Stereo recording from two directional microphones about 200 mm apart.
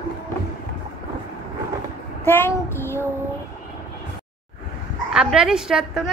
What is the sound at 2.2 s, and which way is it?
Child singing, 10° left (ahead or behind).